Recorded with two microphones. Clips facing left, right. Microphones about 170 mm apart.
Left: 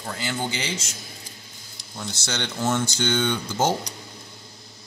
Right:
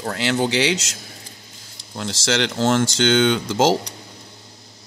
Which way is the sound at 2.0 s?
90° right.